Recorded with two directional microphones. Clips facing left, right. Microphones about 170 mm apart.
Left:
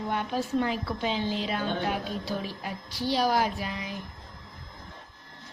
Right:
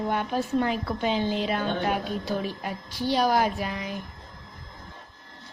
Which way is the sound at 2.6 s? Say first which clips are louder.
Right 2 dB; 50° right (ahead or behind).